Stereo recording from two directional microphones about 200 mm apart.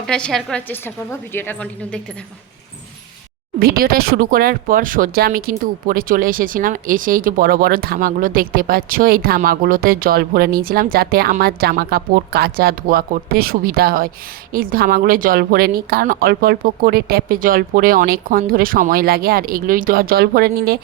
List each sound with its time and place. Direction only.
0.1 s a woman's voice: 5° left (ahead or behind)
3.6 s speech: 50° right (ahead or behind)